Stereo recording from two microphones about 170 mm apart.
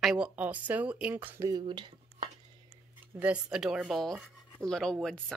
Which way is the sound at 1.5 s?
25° right (ahead or behind).